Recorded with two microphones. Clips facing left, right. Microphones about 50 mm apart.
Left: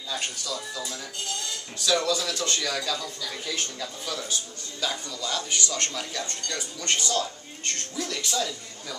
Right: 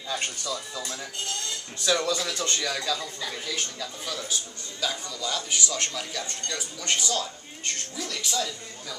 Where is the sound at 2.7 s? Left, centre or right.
Centre.